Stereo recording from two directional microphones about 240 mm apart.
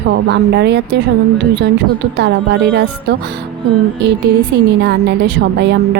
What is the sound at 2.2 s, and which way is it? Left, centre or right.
A woman's voice, right.